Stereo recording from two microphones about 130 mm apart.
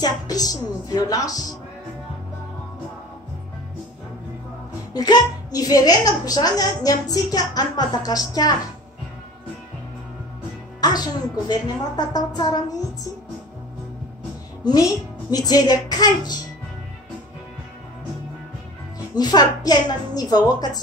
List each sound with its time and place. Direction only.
0.0 s a woman's voice: 30° left (ahead or behind)
4.9 s a woman's voice: 30° left (ahead or behind)
10.8 s a woman's voice: 30° left (ahead or behind)
14.6 s a woman's voice: 30° left (ahead or behind)
19.1 s a woman's voice: 30° left (ahead or behind)